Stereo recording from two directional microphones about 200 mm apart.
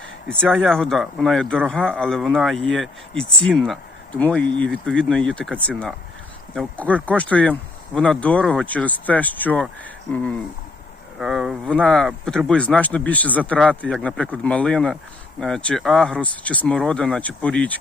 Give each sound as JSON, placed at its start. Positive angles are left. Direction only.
{"t": 0.3, "sound": "speech", "side_deg": 5}